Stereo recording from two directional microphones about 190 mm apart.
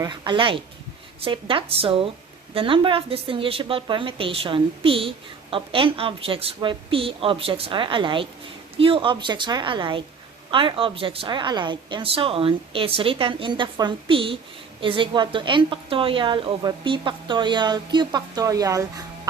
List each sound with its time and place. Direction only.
0.0 s speech: 25° right (ahead or behind)